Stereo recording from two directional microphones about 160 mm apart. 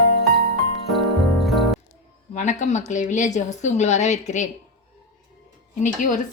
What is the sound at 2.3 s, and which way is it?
A woman's voice, 50° left (ahead or behind).